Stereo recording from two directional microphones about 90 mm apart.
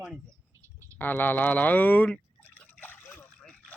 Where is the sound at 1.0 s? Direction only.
20° left (ahead or behind).